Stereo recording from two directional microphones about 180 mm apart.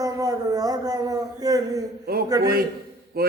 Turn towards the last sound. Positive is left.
turn(degrees=-55)  # may be behind; listen again after turning